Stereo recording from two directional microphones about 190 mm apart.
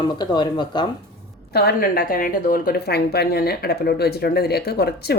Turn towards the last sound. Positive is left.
turn(degrees=60)  # may be behind; listen again after turning